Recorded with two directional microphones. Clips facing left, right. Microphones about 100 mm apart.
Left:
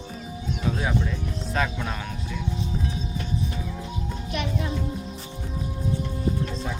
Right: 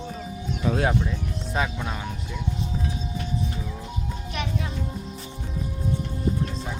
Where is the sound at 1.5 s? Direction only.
10° right (ahead or behind).